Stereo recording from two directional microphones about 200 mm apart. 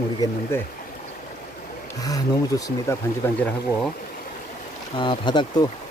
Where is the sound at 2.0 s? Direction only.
15° left (ahead or behind).